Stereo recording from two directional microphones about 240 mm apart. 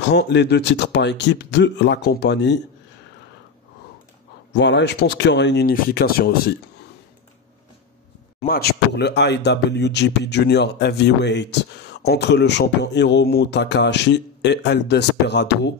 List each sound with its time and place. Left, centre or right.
0.0 s speech: left
4.5 s speech: left
8.4 s speech: left